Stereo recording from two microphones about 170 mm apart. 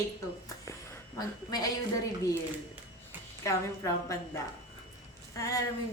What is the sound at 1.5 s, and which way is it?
Speech, 20° left (ahead or behind).